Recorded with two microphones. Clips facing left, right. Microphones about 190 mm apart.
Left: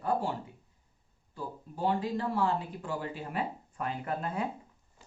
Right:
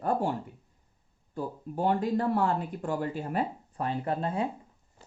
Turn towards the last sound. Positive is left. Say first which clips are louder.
# right 4 dB
turn(degrees=-30)  # may be behind; listen again after turning